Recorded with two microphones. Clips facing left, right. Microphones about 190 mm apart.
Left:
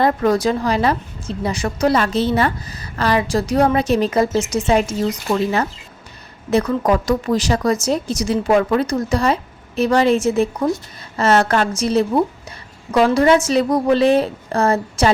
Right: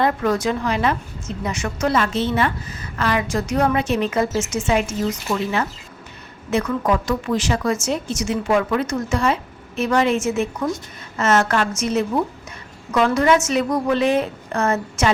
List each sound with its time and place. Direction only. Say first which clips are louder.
0.0 s a woman's voice: left 3 dB; 35° left (ahead or behind)